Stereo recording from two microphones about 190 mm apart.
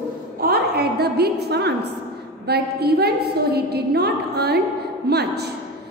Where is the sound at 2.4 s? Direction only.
55° right (ahead or behind).